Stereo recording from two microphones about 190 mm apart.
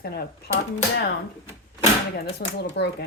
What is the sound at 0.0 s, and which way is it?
Speech, 55° left (ahead or behind).